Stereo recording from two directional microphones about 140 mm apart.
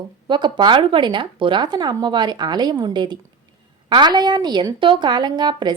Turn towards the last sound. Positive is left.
turn(degrees=-30)  # may be behind; listen again after turning